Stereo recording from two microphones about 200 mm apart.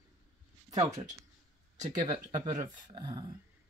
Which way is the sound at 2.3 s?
20° right (ahead or behind).